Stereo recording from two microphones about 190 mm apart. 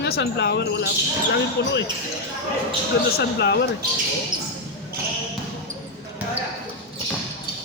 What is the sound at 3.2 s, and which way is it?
Speech, 60° left (ahead or behind).